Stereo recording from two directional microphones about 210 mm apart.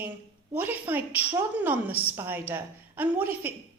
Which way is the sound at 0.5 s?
10° right (ahead or behind).